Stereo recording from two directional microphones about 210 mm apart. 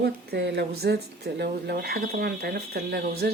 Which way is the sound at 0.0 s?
50° right (ahead or behind).